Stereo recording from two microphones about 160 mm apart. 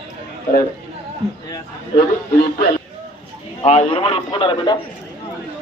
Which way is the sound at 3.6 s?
40° left (ahead or behind).